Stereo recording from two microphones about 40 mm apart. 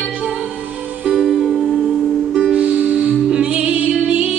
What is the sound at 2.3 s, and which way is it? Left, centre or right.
Music, right.